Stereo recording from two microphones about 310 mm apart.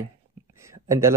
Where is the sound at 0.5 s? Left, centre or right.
Centre.